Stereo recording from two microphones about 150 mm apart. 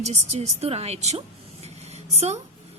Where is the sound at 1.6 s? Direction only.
45° right (ahead or behind).